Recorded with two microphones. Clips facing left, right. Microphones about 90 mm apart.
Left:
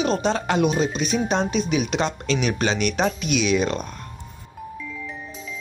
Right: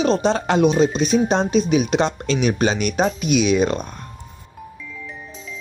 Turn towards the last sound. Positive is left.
turn(degrees=-30)  # may be behind; listen again after turning